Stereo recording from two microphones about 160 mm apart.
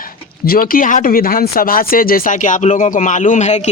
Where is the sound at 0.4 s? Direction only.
65° left (ahead or behind).